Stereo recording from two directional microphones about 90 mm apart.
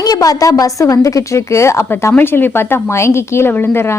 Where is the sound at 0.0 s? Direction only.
45° left (ahead or behind).